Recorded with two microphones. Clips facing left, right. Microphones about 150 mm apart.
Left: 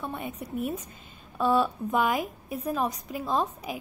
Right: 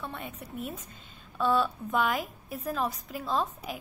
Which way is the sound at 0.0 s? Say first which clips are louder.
Left 4 dB; 15° left (ahead or behind).